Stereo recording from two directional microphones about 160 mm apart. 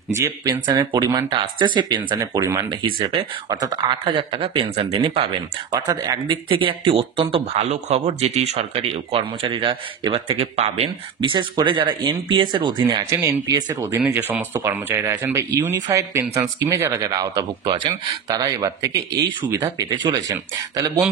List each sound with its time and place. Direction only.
0.1 s speech: 15° right (ahead or behind)
3.0 s speech: 35° right (ahead or behind)
5.7 s speech: 25° right (ahead or behind)
13.1 s speech: 15° right (ahead or behind)
13.9 s speech: 10° right (ahead or behind)